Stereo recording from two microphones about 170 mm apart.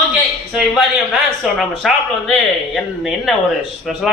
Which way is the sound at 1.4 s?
Centre (ahead or behind).